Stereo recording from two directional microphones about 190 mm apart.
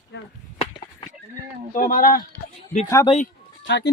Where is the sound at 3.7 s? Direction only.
70° left (ahead or behind).